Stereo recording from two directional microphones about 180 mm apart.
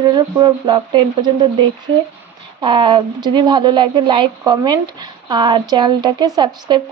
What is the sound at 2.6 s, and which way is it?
Speech, 25° right (ahead or behind).